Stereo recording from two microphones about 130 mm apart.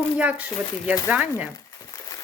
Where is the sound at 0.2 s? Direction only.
10° right (ahead or behind).